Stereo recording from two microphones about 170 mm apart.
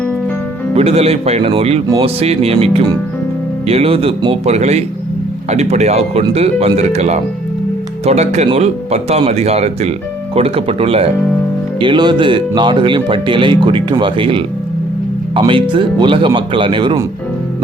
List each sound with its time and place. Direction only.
0.8 s speech: 35° right (ahead or behind)